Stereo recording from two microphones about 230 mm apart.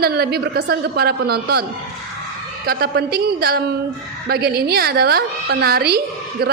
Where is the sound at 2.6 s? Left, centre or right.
Right.